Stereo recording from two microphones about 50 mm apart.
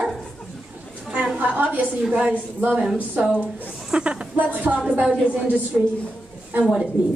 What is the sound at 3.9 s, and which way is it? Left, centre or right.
Speech, centre.